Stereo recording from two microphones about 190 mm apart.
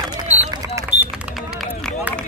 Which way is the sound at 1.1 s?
Centre (ahead or behind).